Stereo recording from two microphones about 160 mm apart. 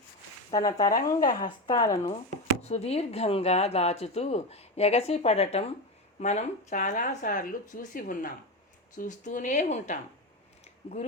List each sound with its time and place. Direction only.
0.5 s speech: 25° left (ahead or behind)
2.6 s speech: 40° left (ahead or behind)